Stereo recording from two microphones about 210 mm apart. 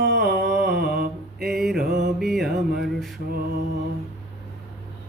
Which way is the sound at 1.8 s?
50° right (ahead or behind).